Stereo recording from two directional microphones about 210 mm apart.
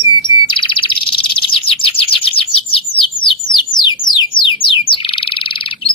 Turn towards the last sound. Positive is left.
turn(degrees=25)  # may be behind; listen again after turning